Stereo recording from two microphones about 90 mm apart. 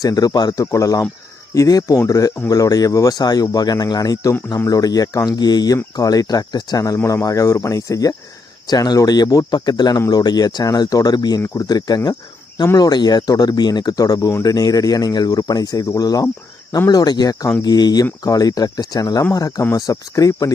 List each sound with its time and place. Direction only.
0.0 s speech: 45° left (ahead or behind)